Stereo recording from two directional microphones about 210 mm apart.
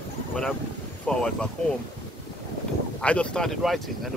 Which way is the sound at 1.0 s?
5° left (ahead or behind).